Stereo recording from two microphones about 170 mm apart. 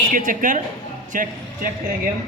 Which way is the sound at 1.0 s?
50° right (ahead or behind).